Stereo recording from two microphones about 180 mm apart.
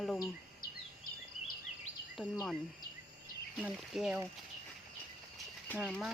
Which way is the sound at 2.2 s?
Centre (ahead or behind).